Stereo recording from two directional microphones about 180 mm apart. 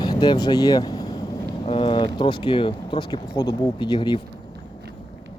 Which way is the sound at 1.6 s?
30° left (ahead or behind).